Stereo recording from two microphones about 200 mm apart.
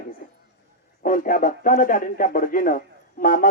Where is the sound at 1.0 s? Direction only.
40° left (ahead or behind).